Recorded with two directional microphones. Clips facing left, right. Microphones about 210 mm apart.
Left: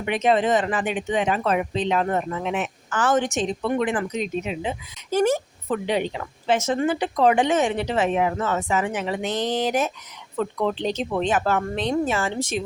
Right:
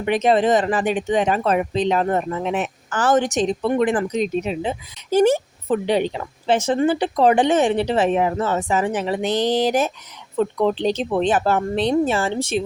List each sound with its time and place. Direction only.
0.0 s speech: 35° right (ahead or behind)